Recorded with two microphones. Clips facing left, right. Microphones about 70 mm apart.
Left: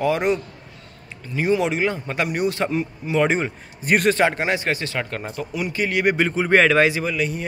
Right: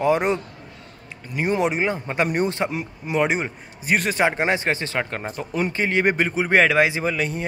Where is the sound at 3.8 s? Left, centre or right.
Centre.